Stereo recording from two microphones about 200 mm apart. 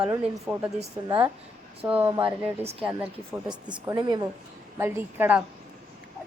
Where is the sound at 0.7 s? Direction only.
25° right (ahead or behind).